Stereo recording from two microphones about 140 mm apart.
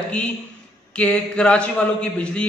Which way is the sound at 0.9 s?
10° left (ahead or behind).